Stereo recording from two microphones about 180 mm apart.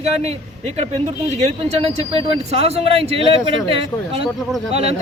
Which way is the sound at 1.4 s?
40° right (ahead or behind).